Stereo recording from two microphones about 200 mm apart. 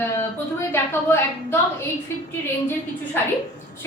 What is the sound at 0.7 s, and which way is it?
Speech, 10° left (ahead or behind).